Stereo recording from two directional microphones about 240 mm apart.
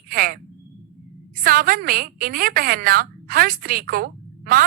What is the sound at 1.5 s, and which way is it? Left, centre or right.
A woman's voice, right.